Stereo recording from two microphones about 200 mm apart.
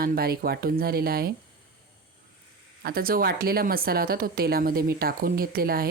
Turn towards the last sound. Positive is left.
turn(degrees=-50)  # may be behind; listen again after turning